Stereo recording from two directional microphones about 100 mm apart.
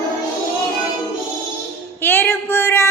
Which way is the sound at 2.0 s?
20° left (ahead or behind).